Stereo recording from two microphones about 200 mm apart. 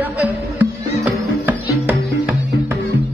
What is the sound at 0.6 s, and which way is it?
Music, 10° right (ahead or behind).